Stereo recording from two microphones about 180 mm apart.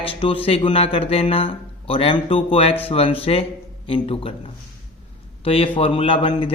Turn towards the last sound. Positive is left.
turn(degrees=30)  # may be behind; listen again after turning